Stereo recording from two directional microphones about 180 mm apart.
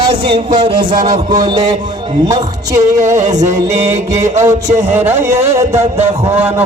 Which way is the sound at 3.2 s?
20° right (ahead or behind).